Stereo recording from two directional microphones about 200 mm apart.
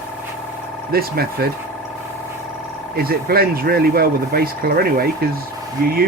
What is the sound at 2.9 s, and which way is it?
Speech, 50° right (ahead or behind).